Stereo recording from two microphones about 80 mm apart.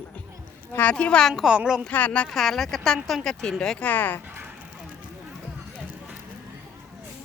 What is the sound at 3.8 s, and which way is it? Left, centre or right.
Speech, left.